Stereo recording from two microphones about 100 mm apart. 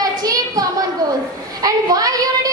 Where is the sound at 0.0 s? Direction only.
40° right (ahead or behind).